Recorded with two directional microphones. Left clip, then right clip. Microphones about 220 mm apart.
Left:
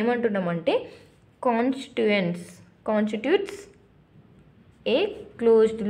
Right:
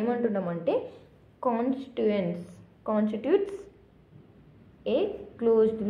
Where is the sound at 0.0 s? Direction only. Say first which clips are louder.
Left 4 dB; 30° left (ahead or behind).